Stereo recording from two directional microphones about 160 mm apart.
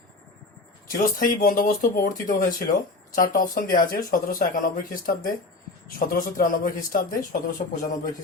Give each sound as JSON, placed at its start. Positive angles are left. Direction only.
{"t": 1.2, "sound": "speech", "side_deg": 60}